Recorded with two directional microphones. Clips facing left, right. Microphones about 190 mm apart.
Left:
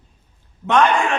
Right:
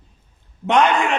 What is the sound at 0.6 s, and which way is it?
Speech, 15° right (ahead or behind).